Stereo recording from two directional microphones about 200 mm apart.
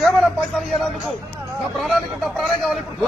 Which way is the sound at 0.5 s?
Centre (ahead or behind).